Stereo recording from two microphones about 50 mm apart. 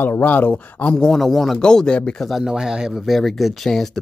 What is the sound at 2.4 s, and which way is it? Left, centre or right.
Speech, centre.